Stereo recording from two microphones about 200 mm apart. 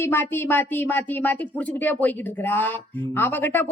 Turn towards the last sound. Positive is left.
turn(degrees=10)  # may be behind; listen again after turning